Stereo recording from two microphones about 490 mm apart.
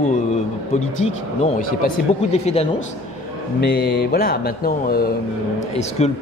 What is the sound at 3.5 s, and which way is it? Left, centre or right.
A man's voice, centre.